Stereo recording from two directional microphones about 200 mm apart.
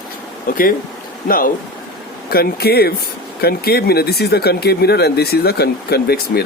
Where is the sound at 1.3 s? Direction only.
45° left (ahead or behind).